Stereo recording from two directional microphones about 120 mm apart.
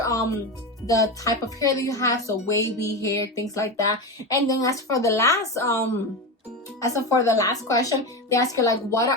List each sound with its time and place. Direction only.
0.0 s music: 30° left (ahead or behind)
0.9 s a woman's voice: 30° left (ahead or behind)